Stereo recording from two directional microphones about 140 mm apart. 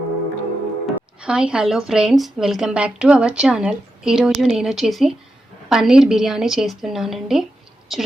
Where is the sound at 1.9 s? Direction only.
5° right (ahead or behind).